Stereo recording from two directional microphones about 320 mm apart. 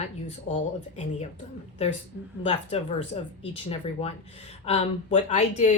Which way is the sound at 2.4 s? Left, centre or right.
Centre.